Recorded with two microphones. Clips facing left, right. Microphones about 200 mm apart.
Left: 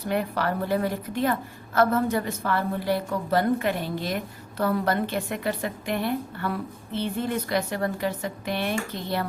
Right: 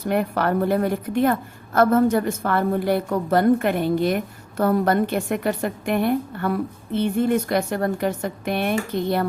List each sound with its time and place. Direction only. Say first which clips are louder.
0.1 s a woman's voice: right 5 dB; 55° right (ahead or behind)